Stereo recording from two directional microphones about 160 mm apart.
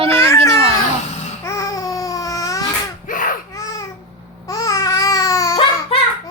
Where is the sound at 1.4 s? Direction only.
20° left (ahead or behind).